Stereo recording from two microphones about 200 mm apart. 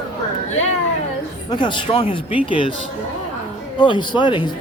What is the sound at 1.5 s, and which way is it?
Speech, 25° left (ahead or behind).